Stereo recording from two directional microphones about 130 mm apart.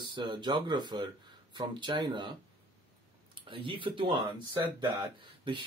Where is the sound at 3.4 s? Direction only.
40° right (ahead or behind).